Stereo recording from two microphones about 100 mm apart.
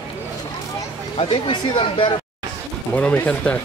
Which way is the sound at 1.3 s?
60° left (ahead or behind).